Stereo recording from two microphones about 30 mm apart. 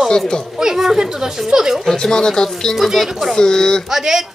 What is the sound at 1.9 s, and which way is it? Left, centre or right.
Speech, centre.